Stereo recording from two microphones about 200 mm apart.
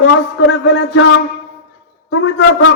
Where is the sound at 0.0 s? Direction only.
70° left (ahead or behind).